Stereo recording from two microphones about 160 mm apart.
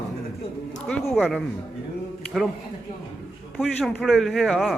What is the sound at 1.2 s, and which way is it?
A man's voice, centre (ahead or behind).